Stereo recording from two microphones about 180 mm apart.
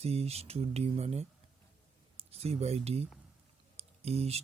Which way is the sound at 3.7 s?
35° right (ahead or behind).